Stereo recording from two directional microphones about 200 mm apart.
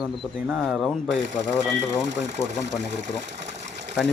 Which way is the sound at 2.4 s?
15° left (ahead or behind).